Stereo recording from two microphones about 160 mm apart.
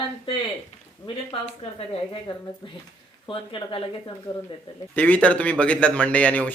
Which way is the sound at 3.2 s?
35° left (ahead or behind).